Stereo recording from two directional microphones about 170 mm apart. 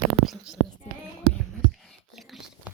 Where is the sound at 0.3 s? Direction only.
5° right (ahead or behind).